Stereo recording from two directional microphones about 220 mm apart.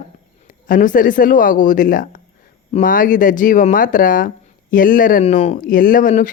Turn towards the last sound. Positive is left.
turn(degrees=40)  # may be behind; listen again after turning